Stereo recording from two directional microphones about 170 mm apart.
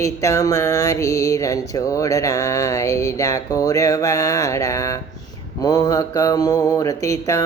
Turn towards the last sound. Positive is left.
turn(degrees=20)  # may be behind; listen again after turning